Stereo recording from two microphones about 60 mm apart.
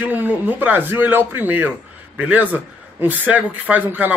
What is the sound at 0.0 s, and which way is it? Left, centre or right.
A man's voice, right.